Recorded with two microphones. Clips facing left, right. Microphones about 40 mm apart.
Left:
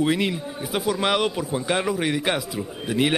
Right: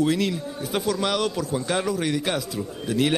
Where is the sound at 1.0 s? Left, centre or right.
Left.